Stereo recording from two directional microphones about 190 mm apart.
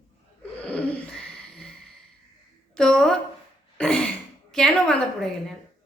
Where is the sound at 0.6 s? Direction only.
5° left (ahead or behind).